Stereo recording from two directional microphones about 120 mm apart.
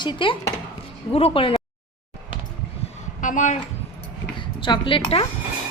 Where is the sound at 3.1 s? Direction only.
90° left.